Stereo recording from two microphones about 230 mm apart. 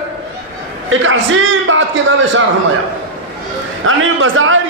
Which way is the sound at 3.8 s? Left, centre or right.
Right.